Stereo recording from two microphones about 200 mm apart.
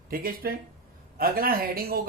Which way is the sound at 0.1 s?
45° right (ahead or behind).